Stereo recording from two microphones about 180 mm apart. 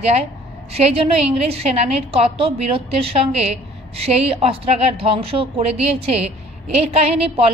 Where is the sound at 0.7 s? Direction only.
35° right (ahead or behind).